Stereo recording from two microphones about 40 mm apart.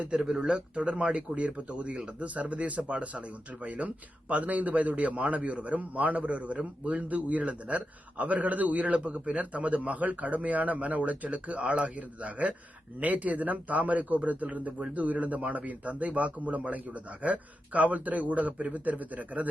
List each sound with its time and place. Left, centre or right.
0.1 s speech: centre
0.9 s a man's voice: right
7.1 s a man's voice: right